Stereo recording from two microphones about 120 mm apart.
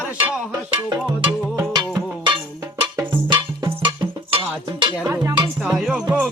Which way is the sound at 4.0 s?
45° right (ahead or behind).